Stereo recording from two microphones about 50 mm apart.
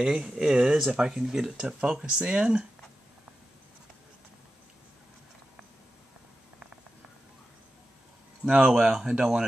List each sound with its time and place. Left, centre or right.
0.0 s speech: centre
8.5 s speech: centre